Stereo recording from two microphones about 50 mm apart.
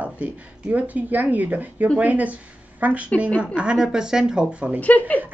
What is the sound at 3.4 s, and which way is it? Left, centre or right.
A woman's voice, right.